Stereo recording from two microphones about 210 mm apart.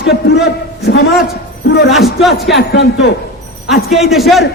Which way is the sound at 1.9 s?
Centre (ahead or behind).